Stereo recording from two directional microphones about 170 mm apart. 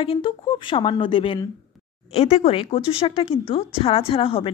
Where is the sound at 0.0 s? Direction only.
30° left (ahead or behind).